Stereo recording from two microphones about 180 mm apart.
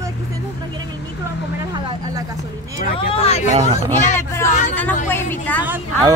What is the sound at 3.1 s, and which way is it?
Speech, 35° left (ahead or behind).